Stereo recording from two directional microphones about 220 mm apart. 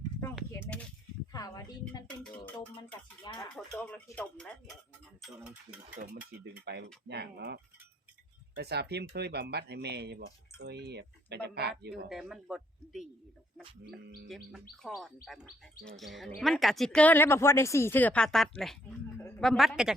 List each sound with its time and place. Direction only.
0.3 s speech: 5° left (ahead or behind)
1.3 s speech: 15° left (ahead or behind)
2.0 s speech: 5° left (ahead or behind)
3.2 s speech: 20° left (ahead or behind)
3.5 s speech: 5° left (ahead or behind)
6.0 s speech: 50° right (ahead or behind)
12.0 s speech: centre (ahead or behind)
14.3 s speech: centre (ahead or behind)